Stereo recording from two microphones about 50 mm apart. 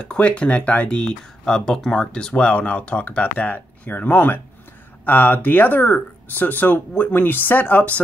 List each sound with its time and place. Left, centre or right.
0.0 s speech: left